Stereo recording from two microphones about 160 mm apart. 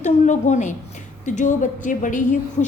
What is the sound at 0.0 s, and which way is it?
A woman's voice, 50° left (ahead or behind).